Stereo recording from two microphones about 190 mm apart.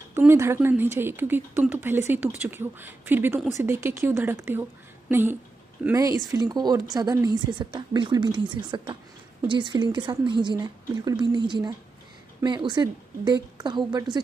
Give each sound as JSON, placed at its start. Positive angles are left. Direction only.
{"t": 0.1, "sound": "a woman's voice", "side_deg": -15}